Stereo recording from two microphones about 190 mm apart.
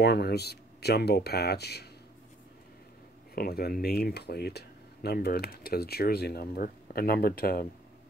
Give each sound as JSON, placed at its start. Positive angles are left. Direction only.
{"t": 0.0, "sound": "speech", "side_deg": 55}
{"t": 3.3, "sound": "speech", "side_deg": 55}